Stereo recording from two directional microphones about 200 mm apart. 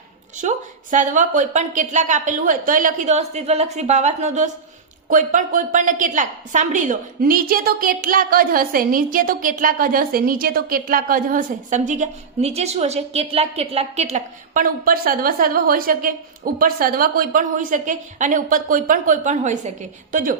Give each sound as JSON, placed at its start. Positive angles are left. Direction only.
{"t": 0.3, "sound": "a woman's voice", "side_deg": -40}